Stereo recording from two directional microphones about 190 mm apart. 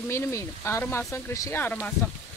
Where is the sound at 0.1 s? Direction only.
15° left (ahead or behind).